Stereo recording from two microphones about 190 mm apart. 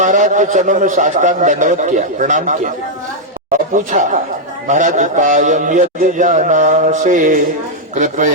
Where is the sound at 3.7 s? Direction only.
40° right (ahead or behind).